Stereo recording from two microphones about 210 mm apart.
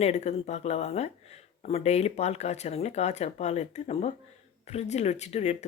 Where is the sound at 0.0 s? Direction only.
30° left (ahead or behind).